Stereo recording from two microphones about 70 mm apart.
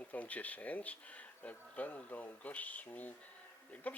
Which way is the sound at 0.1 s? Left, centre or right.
Left.